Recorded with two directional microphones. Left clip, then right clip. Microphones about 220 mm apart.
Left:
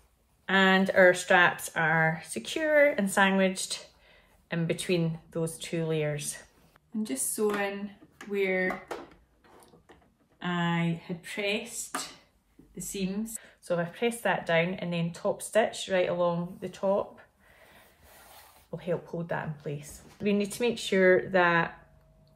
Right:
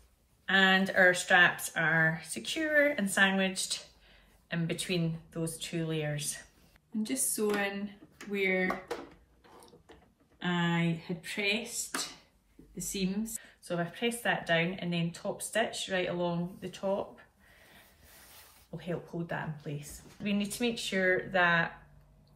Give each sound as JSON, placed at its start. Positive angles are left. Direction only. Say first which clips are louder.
{"t": 0.5, "sound": "speech", "louder": "left 2 dB", "side_deg": 35}
{"t": 7.0, "sound": "speech", "louder": "left 3 dB", "side_deg": 10}
{"t": 10.4, "sound": "speech", "louder": "left 1 dB", "side_deg": 5}
{"t": 13.3, "sound": "speech", "louder": "left 6 dB", "side_deg": 30}
{"t": 18.8, "sound": "speech", "louder": "left 6 dB", "side_deg": 30}